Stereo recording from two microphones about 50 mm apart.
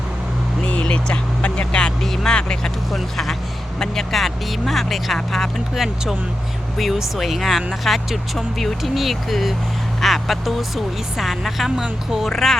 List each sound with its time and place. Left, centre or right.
0.6 s vehicle: left
2.0 s music: centre
2.9 s vehicle: centre
3.8 s speech: centre
5.7 s speech: centre
12.3 s speech: centre